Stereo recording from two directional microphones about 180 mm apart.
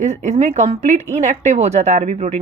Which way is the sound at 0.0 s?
40° right (ahead or behind).